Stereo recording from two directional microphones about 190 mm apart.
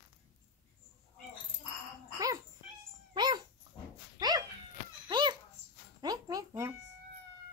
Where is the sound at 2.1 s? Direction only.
20° right (ahead or behind).